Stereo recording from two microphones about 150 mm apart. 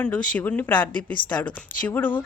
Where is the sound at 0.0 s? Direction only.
10° left (ahead or behind).